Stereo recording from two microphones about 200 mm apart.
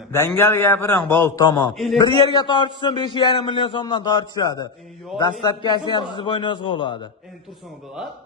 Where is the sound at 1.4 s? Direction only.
20° left (ahead or behind).